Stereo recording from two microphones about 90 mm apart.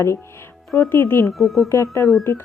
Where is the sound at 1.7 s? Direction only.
35° left (ahead or behind).